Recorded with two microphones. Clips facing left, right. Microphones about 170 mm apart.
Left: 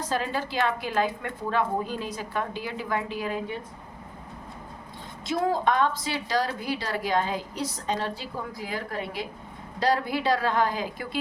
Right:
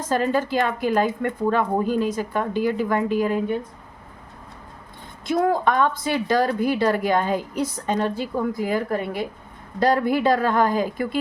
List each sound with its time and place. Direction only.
0.1 s a woman's voice: 45° right (ahead or behind)
5.2 s a woman's voice: 55° right (ahead or behind)